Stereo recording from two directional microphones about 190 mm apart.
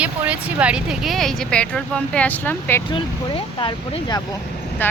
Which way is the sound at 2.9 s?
25° left (ahead or behind).